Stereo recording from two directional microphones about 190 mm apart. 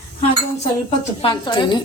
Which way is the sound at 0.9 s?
25° left (ahead or behind).